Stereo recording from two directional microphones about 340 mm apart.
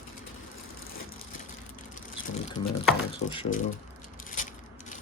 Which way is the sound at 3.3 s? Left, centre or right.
Centre.